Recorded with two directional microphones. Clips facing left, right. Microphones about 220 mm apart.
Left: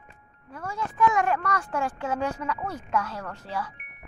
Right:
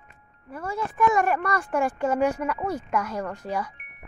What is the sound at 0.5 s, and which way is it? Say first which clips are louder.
Speech: right 3 dB; 10° right (ahead or behind).